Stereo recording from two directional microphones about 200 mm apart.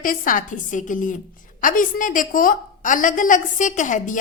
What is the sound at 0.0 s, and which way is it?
Speech, 45° left (ahead or behind).